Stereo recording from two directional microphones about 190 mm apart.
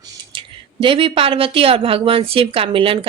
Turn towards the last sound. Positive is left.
turn(degrees=-30)  # may be behind; listen again after turning